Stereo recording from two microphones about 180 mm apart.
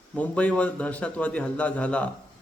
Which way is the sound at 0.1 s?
5° left (ahead or behind).